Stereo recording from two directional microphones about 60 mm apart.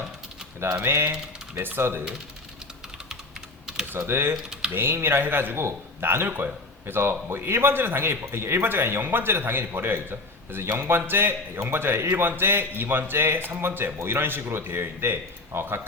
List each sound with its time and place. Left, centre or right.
0.6 s speech: right
3.9 s speech: right